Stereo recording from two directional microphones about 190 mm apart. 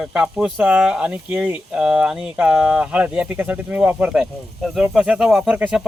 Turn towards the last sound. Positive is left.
turn(degrees=-5)  # may be behind; listen again after turning